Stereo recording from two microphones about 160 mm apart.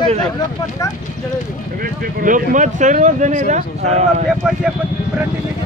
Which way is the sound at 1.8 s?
55° right (ahead or behind).